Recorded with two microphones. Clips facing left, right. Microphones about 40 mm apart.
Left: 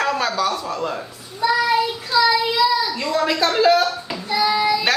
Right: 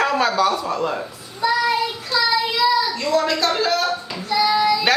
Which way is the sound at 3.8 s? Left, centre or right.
Centre.